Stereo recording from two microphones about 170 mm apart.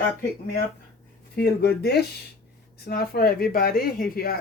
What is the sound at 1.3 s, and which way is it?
Speech, 70° left (ahead or behind).